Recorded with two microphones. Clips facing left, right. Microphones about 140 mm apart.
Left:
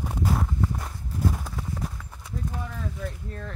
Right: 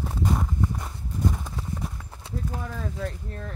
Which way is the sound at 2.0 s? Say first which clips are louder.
Right 1 dB; 30° right (ahead or behind).